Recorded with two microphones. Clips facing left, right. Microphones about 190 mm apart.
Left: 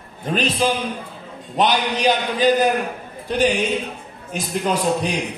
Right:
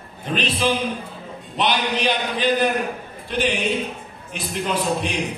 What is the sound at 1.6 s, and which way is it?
A man's voice, 45° left (ahead or behind).